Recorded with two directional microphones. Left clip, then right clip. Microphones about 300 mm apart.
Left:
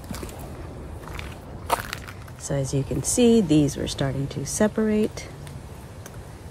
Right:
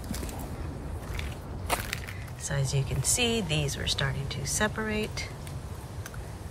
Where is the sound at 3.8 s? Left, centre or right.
Centre.